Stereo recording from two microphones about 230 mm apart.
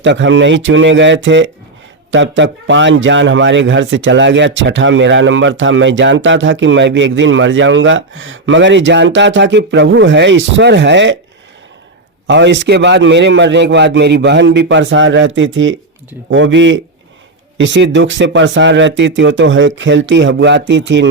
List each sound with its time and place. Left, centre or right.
0.0 s a man's voice: right
12.3 s a man's voice: right